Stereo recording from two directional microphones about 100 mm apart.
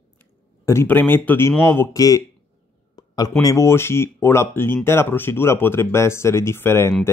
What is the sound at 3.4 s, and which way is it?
Speech, 30° left (ahead or behind).